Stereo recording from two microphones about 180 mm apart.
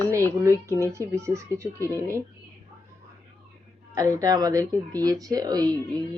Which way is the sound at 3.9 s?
20° right (ahead or behind).